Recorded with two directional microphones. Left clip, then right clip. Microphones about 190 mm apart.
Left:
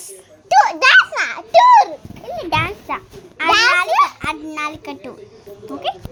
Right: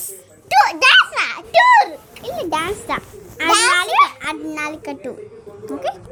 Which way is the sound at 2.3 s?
Centre (ahead or behind).